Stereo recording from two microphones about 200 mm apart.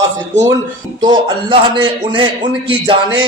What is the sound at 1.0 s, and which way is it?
A man's voice, 25° right (ahead or behind).